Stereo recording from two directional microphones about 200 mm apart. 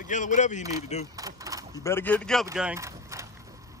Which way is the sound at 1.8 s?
10° left (ahead or behind).